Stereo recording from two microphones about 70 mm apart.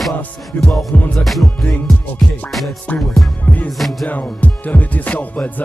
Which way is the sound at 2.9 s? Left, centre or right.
Left.